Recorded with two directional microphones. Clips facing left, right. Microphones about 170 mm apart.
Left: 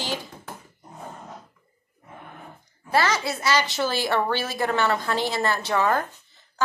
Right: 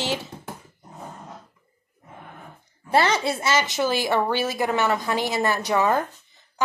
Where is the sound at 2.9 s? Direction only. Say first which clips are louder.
Right 2 dB; 25° right (ahead or behind).